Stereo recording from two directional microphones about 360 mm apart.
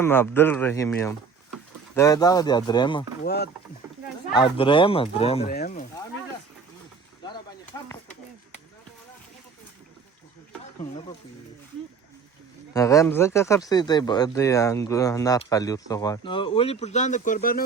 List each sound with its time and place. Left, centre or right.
0.0 s speech: centre
3.2 s speech: left
4.4 s speech: centre
7.2 s a sound: centre
12.7 s speech: centre